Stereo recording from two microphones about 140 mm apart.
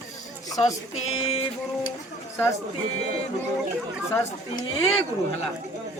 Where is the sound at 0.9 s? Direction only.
50° left (ahead or behind).